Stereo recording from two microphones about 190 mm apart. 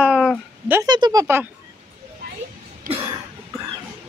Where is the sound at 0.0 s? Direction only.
Centre (ahead or behind).